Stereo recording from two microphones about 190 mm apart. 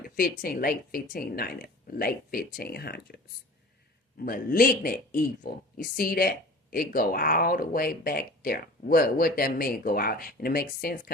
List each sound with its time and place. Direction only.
0.0 s speech: 50° left (ahead or behind)
4.2 s speech: 50° left (ahead or behind)